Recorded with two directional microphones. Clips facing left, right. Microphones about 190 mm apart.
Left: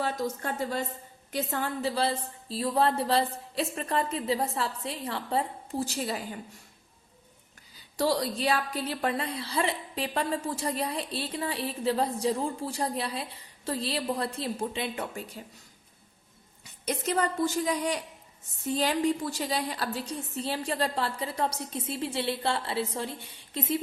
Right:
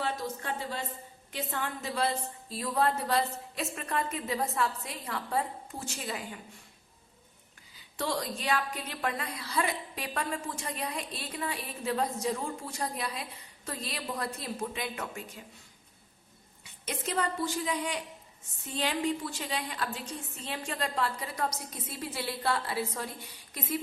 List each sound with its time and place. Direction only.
0.0 s a woman's voice: 45° left (ahead or behind)
7.9 s a woman's voice: 35° left (ahead or behind)
16.8 s a woman's voice: 40° left (ahead or behind)